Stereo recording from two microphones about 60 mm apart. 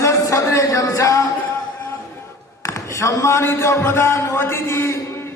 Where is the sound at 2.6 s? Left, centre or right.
Left.